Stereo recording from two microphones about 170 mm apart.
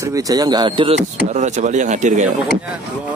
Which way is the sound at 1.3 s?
45° right (ahead or behind).